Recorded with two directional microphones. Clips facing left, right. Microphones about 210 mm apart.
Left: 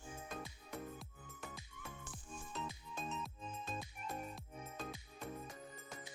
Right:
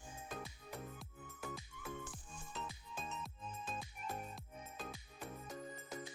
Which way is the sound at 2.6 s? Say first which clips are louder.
Left 2 dB; centre (ahead or behind).